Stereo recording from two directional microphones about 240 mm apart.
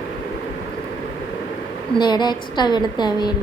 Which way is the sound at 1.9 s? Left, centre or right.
Centre.